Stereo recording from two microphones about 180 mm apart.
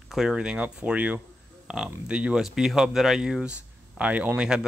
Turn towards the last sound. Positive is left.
turn(degrees=-5)  # may be behind; listen again after turning